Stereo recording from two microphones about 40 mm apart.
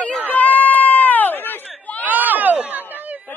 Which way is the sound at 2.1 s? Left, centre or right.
Right.